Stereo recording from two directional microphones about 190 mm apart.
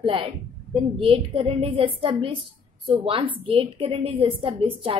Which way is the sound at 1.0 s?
30° right (ahead or behind).